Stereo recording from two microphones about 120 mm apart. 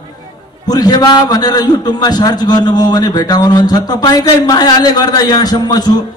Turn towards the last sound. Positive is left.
turn(degrees=35)  # may be behind; listen again after turning